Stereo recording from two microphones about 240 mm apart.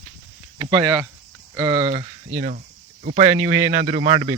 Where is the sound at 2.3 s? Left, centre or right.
Right.